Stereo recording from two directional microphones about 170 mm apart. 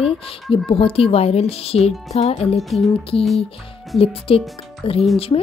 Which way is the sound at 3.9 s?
35° left (ahead or behind).